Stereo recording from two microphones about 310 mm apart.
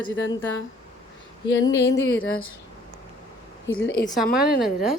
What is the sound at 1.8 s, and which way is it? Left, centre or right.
Speech, left.